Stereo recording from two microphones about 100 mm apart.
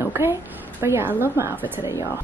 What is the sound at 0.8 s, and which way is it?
Speech, 20° right (ahead or behind).